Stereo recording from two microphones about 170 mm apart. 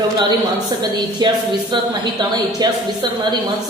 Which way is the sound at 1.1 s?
25° right (ahead or behind).